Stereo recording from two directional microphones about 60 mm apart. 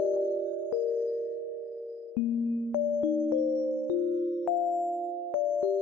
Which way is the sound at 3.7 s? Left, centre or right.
Left.